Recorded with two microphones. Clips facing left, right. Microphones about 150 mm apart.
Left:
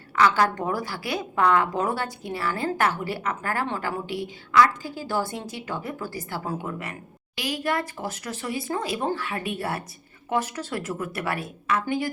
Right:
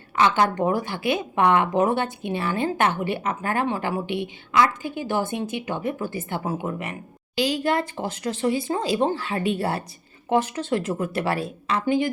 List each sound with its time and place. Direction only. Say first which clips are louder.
0.2 s a woman's voice: right 1 dB; 20° right (ahead or behind)